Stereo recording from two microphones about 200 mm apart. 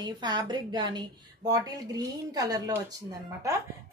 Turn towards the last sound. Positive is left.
turn(degrees=-15)  # may be behind; listen again after turning